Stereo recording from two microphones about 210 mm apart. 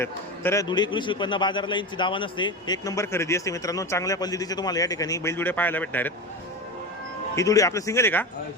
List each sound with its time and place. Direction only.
0.0 s a man's voice: 10° left (ahead or behind)
7.3 s a man's voice: 15° left (ahead or behind)